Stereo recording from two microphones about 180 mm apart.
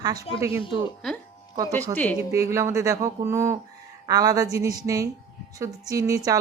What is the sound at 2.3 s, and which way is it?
Speech, 15° right (ahead or behind).